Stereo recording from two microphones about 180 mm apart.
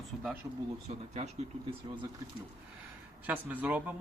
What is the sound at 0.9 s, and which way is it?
Speech, 40° right (ahead or behind).